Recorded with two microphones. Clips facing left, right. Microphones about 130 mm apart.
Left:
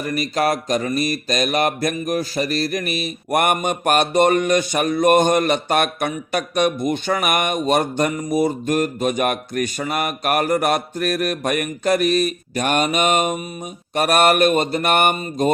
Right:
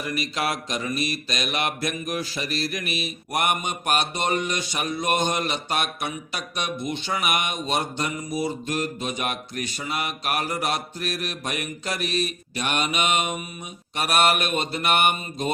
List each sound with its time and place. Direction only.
0.0 s mantra: 45° left (ahead or behind)